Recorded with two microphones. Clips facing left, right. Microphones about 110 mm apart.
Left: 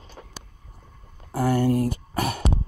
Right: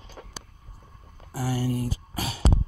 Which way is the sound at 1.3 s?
55° left (ahead or behind).